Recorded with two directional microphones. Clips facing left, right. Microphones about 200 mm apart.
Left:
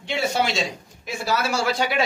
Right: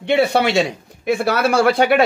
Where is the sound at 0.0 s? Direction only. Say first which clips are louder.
Right 8 dB; 60° right (ahead or behind).